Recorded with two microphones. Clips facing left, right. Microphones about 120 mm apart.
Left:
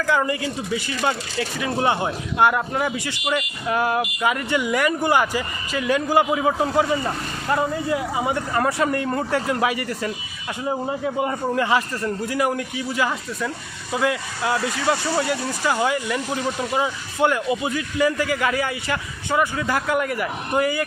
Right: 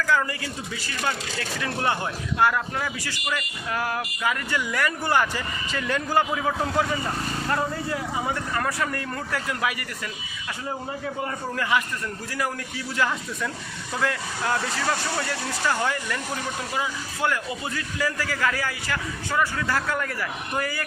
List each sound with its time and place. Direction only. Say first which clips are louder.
0.0 s a man's voice: left 3 dB; 20° left (ahead or behind)